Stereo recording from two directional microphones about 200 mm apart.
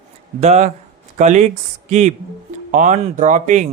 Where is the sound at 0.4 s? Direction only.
35° right (ahead or behind).